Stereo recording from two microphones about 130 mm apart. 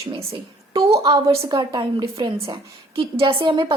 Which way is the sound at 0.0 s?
50° right (ahead or behind).